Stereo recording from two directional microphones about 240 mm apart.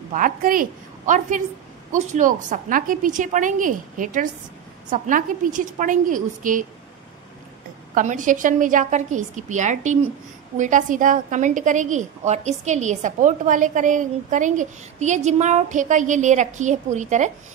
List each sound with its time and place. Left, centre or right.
0.1 s a woman's voice: right
7.9 s a woman's voice: right